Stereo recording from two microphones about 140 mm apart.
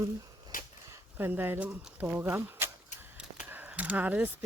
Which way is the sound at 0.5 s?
80° left.